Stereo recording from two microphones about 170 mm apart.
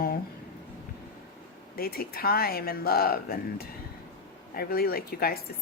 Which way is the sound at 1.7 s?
60° left (ahead or behind).